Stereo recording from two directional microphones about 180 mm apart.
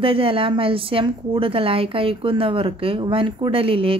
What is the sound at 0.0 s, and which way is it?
A woman's voice, 30° right (ahead or behind).